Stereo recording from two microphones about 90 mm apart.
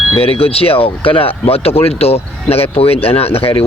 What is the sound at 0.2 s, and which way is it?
Speech, 90° left.